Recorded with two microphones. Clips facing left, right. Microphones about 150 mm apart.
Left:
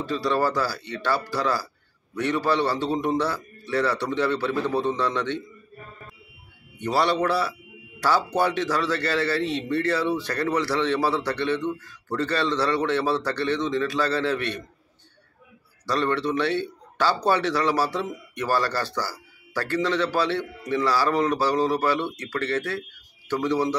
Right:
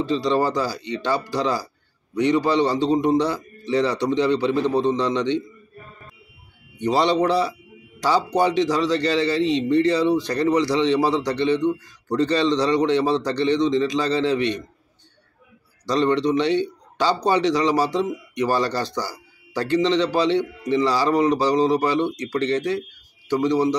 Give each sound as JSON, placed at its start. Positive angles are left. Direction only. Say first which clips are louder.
{"t": 0.0, "sound": "a man's voice", "louder": "right 3 dB", "side_deg": -20}
{"t": 6.8, "sound": "a man's voice", "louder": "right 4 dB", "side_deg": -20}
{"t": 15.9, "sound": "a man's voice", "louder": "right 5 dB", "side_deg": -15}